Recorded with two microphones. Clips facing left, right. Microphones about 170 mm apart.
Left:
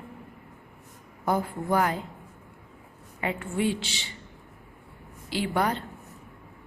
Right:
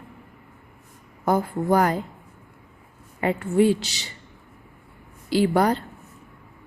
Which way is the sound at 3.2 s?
40° right (ahead or behind).